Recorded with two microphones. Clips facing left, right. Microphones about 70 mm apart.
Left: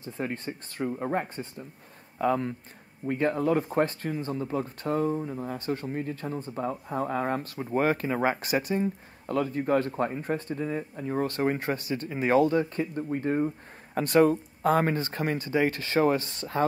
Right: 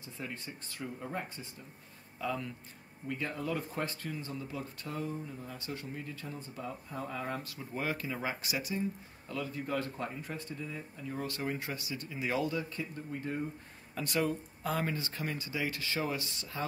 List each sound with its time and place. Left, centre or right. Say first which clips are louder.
0.0 s speech: left 10 dB; left